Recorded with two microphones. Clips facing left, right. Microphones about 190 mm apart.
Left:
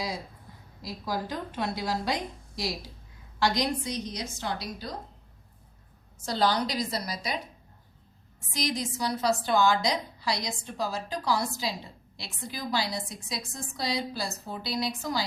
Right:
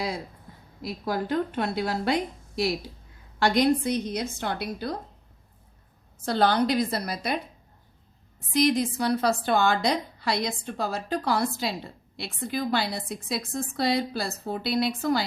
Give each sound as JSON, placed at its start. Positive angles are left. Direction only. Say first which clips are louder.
{"t": 0.8, "sound": "a woman's voice", "louder": "right 4 dB", "side_deg": -60}
{"t": 6.2, "sound": "a woman's voice", "louder": "right 4 dB", "side_deg": -55}